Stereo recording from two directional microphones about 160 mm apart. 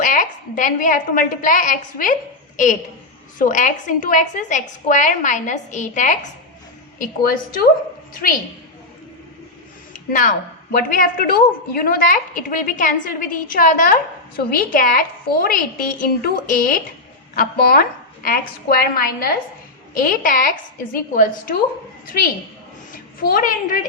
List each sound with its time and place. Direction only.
0.0 s a woman's voice: 55° left (ahead or behind)
3.3 s a woman's voice: 55° left (ahead or behind)
7.0 s a woman's voice: 65° left (ahead or behind)
10.1 s a woman's voice: 60° left (ahead or behind)